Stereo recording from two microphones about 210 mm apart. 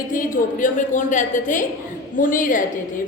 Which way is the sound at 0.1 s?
40° left (ahead or behind).